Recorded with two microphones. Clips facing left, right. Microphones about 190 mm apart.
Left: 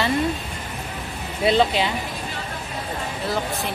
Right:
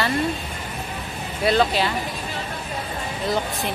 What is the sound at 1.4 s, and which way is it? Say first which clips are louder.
Speech: left 1 dB; 20° left (ahead or behind).